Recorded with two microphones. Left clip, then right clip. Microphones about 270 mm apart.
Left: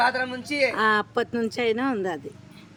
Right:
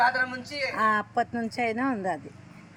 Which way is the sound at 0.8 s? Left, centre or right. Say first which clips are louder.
Left 2 dB; centre.